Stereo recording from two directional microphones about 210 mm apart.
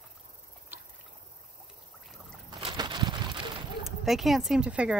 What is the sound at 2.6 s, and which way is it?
Bird, 20° right (ahead or behind).